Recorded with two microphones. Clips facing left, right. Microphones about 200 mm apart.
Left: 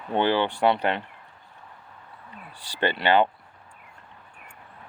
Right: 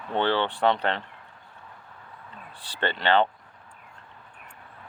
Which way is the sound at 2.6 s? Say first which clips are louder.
Left 3 dB; 15° left (ahead or behind).